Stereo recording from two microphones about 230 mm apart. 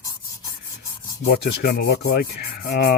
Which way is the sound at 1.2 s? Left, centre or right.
Left.